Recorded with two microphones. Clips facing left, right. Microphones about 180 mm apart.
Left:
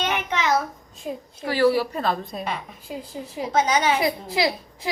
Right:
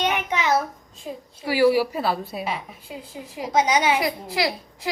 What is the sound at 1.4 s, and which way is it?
A woman's voice, 10° right (ahead or behind).